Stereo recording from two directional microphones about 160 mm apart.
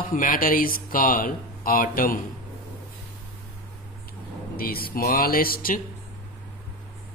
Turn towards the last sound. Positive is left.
turn(degrees=65)  # may be behind; listen again after turning